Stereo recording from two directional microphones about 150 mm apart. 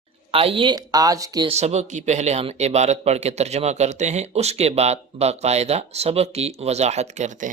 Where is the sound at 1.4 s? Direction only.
45° right (ahead or behind).